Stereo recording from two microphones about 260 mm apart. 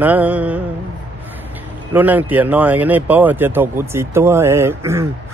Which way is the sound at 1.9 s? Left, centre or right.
Centre.